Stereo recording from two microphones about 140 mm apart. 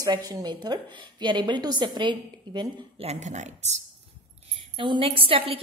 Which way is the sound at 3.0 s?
50° right (ahead or behind).